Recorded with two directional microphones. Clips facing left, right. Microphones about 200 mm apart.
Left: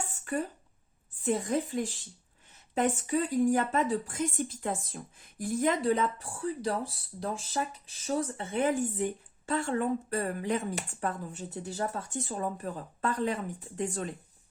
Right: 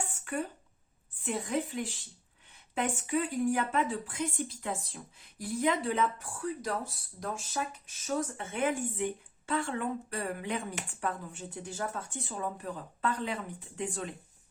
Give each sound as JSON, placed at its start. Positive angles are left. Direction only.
{"t": 1.2, "sound": "speech", "side_deg": 40}
{"t": 6.4, "sound": "speech", "side_deg": 30}